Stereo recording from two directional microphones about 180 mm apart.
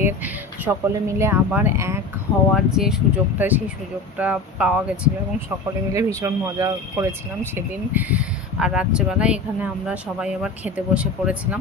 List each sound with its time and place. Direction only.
0.0 s speech: 15° right (ahead or behind)
2.5 s speech: centre (ahead or behind)
5.9 s speech: 15° right (ahead or behind)